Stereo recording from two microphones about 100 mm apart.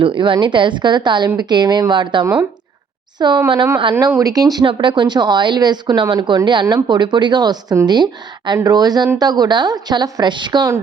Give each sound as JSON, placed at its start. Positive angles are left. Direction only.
{"t": 0.0, "sound": "speech", "side_deg": -55}
{"t": 4.6, "sound": "speech", "side_deg": -55}